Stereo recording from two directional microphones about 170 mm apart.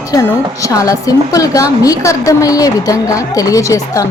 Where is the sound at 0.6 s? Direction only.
20° left (ahead or behind).